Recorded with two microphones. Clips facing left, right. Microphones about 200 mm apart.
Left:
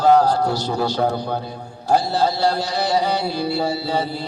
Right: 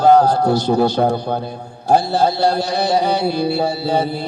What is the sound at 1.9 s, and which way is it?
Mantra, 55° right (ahead or behind).